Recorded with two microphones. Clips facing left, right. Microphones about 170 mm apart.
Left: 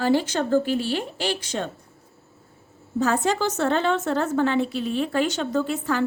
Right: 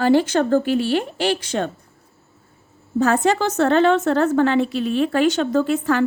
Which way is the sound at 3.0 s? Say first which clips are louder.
Right 4 dB; 70° right (ahead or behind).